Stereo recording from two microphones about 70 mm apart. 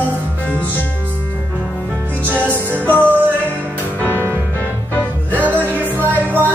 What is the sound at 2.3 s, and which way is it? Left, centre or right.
Music, left.